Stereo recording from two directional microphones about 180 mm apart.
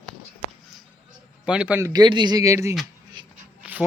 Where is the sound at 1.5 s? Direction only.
5° right (ahead or behind).